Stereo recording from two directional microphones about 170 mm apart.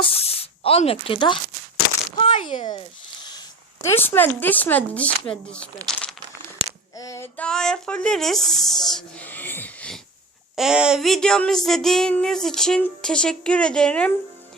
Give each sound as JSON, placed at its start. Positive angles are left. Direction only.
{"t": 0.0, "sound": "spray", "side_deg": 35}
{"t": 2.1, "sound": "a sound", "side_deg": 45}
{"t": 3.8, "sound": "speech", "side_deg": 10}
{"t": 7.0, "sound": "female singing", "side_deg": 20}
{"t": 7.3, "sound": "speech", "side_deg": 5}
{"t": 10.5, "sound": "speech", "side_deg": -5}